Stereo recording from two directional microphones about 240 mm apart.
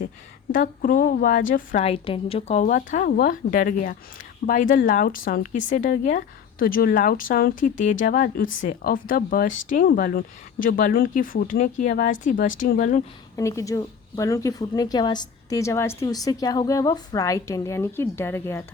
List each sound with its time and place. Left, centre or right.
0.5 s a woman's voice: left
13.3 s a woman's voice: centre